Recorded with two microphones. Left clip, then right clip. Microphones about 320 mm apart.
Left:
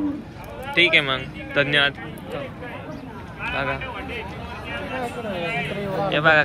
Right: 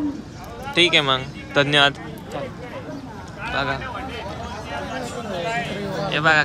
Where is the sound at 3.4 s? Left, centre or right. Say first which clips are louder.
Right 1 dB; centre.